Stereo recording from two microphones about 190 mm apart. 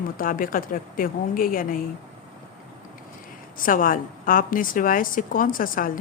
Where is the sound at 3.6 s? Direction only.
45° left (ahead or behind).